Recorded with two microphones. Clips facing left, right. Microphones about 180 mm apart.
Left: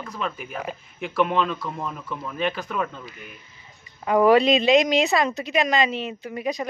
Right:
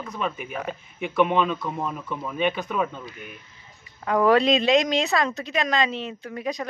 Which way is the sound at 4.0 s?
10° left (ahead or behind).